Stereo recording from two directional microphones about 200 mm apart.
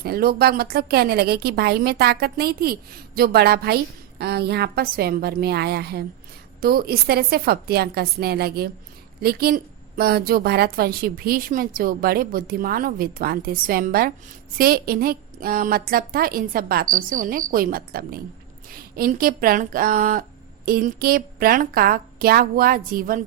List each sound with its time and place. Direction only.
0.0 s a woman's voice: 50° right (ahead or behind)